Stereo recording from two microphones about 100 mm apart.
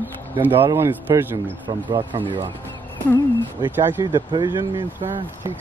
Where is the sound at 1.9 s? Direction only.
60° right (ahead or behind).